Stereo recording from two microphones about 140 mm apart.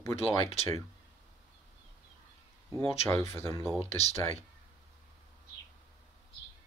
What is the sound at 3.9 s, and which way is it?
Speech, 50° left (ahead or behind).